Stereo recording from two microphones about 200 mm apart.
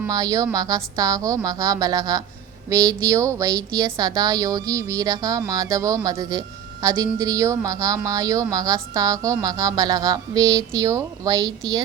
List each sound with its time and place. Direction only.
0.1 s a woman's voice: 20° right (ahead or behind)